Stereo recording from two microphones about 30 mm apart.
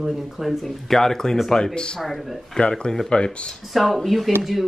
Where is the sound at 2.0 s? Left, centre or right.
Centre.